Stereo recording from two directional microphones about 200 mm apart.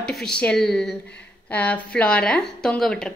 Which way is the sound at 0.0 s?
5° left (ahead or behind).